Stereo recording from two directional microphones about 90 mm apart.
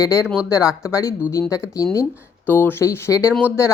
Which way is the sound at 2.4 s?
20° left (ahead or behind).